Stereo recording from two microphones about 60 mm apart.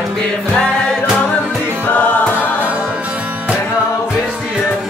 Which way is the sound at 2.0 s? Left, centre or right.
Left.